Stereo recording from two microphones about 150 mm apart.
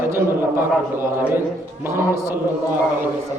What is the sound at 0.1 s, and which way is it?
A man's voice, 15° right (ahead or behind).